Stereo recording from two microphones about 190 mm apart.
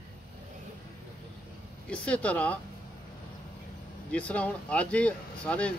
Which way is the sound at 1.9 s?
5° left (ahead or behind).